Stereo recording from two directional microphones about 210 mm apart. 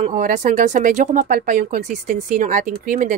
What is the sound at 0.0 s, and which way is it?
Speech, 35° right (ahead or behind).